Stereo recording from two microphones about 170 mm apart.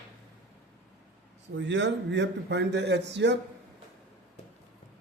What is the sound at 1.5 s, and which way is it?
Speech, 90° right.